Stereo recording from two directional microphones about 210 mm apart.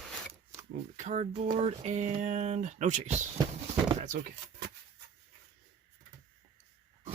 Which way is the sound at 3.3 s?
25° right (ahead or behind).